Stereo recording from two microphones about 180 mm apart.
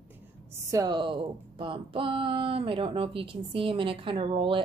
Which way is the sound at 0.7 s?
20° right (ahead or behind).